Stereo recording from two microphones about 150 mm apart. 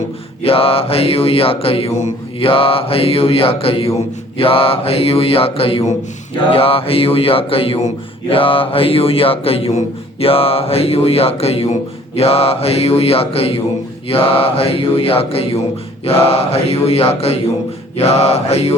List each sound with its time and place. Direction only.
0.4 s speech: 40° left (ahead or behind)
16.0 s mantra: 40° left (ahead or behind)